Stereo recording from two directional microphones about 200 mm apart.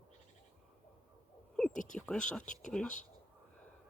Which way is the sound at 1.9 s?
5° left (ahead or behind).